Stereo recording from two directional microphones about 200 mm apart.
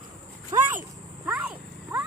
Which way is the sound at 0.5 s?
15° right (ahead or behind).